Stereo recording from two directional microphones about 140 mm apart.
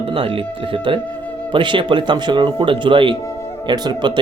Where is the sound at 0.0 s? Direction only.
40° right (ahead or behind).